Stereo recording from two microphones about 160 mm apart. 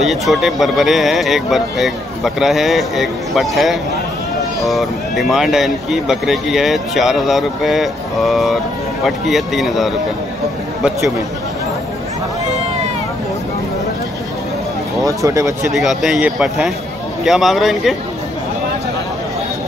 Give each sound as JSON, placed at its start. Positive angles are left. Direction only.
{"t": 0.0, "sound": "speech", "side_deg": 0}
{"t": 15.0, "sound": "speech", "side_deg": -20}
{"t": 15.7, "sound": "speech", "side_deg": 0}